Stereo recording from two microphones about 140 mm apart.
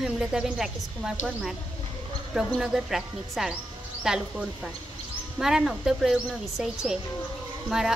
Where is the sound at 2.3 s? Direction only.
5° right (ahead or behind).